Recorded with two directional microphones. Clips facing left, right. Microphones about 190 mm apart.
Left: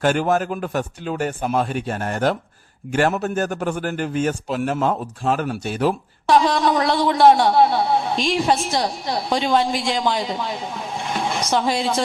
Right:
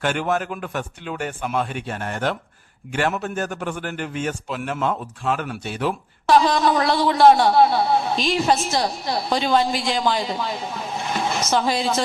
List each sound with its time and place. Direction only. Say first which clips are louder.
0.0 s a man's voice: left 4 dB; 40° left (ahead or behind)
6.2 s a man's voice: even; centre (ahead or behind)